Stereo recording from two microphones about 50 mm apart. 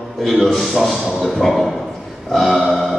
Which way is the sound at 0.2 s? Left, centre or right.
Centre.